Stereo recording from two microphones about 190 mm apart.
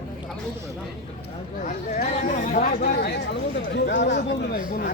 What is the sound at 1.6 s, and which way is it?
Speech, 40° left (ahead or behind).